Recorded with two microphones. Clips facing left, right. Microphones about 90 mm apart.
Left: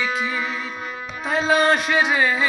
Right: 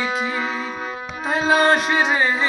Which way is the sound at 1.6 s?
40° right (ahead or behind).